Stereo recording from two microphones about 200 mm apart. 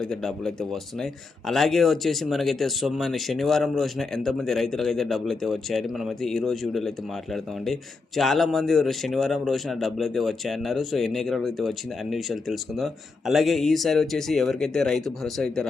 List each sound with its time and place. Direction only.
0.0 s speech: centre (ahead or behind)